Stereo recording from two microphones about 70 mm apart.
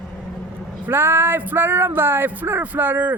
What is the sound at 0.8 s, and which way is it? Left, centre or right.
Speech, right.